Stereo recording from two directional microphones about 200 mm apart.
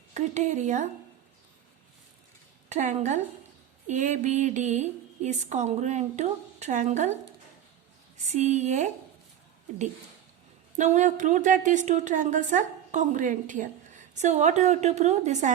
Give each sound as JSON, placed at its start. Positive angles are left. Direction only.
{"t": 0.1, "sound": "a woman's voice", "side_deg": -35}
{"t": 2.6, "sound": "a woman's voice", "side_deg": -35}
{"t": 8.3, "sound": "a woman's voice", "side_deg": -35}
{"t": 10.8, "sound": "a woman's voice", "side_deg": -35}